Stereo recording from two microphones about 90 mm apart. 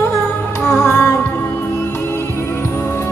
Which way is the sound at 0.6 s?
25° left (ahead or behind).